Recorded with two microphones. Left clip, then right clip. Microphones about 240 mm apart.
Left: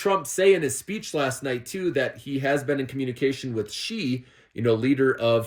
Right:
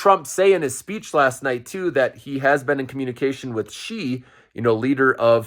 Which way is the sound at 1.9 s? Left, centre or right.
Right.